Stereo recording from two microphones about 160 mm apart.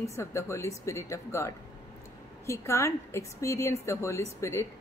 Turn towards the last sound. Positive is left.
turn(degrees=20)  # may be behind; listen again after turning